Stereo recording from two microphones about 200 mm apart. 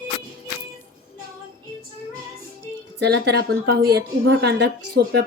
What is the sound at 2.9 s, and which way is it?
A woman's voice, 55° right (ahead or behind).